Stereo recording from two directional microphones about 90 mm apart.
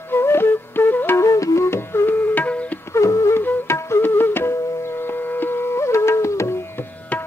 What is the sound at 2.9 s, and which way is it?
Music, 35° left (ahead or behind).